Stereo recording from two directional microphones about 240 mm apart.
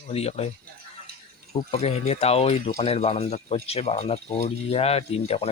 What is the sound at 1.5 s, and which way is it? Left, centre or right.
Speech, left.